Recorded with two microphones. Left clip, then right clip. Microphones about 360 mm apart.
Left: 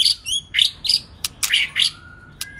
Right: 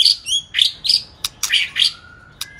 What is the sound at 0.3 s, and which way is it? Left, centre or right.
Bird, centre.